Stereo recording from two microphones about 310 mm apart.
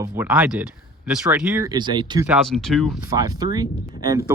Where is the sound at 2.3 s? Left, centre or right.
Centre.